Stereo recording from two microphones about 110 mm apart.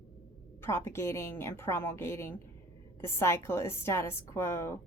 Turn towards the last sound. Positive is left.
turn(degrees=25)  # may be behind; listen again after turning